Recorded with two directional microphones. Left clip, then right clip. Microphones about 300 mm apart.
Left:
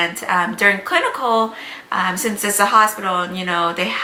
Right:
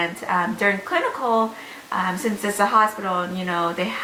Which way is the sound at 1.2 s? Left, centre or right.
Right.